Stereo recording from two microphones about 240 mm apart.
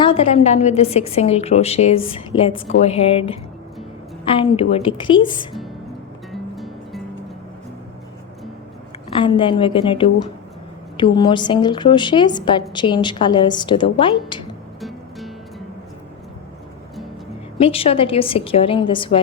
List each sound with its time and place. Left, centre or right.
0.0 s a woman's voice: left
6.3 s music: centre
9.1 s a woman's voice: centre
14.8 s music: centre
17.6 s a woman's voice: left